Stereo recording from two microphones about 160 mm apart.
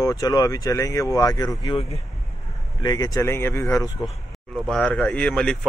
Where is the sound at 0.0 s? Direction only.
25° left (ahead or behind).